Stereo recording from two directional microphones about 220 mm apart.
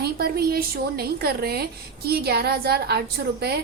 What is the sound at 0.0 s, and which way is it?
A woman's voice, 45° right (ahead or behind).